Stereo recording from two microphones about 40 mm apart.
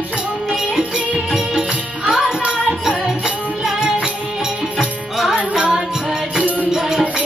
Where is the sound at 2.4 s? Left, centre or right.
Right.